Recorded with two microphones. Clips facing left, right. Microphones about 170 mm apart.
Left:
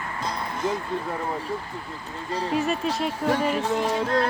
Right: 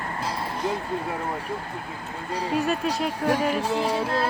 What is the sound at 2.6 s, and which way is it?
Speech, centre (ahead or behind).